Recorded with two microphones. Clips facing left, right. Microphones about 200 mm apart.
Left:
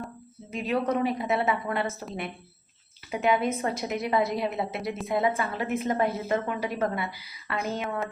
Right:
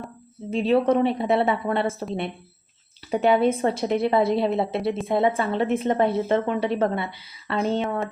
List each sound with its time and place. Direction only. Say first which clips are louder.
0.5 s a woman's voice: right 7 dB; 30° right (ahead or behind)
3.1 s a woman's voice: right 6 dB; 35° right (ahead or behind)